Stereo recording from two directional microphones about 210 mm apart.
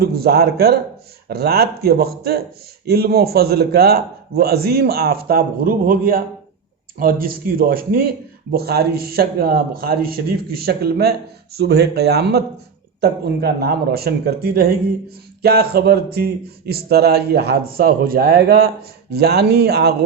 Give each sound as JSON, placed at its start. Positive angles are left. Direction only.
{"t": 0.0, "sound": "a man's voice", "side_deg": -50}